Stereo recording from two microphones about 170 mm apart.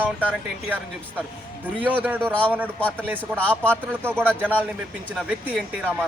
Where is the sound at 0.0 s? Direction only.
10° right (ahead or behind).